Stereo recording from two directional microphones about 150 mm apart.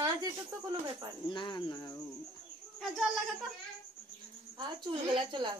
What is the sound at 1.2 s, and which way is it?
Speech, 30° left (ahead or behind).